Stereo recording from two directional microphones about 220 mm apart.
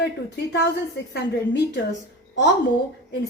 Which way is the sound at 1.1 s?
50° left (ahead or behind).